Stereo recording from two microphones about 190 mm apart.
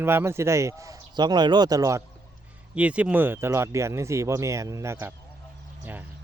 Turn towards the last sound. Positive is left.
turn(degrees=-10)  # may be behind; listen again after turning